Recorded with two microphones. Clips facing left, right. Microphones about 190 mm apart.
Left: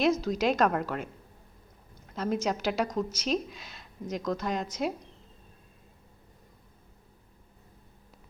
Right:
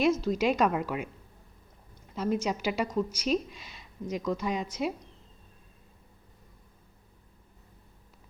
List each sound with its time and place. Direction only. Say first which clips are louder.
0.0 s a woman's voice: even; 5° right (ahead or behind)